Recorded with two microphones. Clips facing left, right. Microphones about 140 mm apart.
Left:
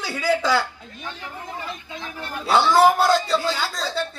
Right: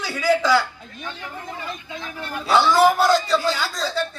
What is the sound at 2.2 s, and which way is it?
Speech, 25° left (ahead or behind).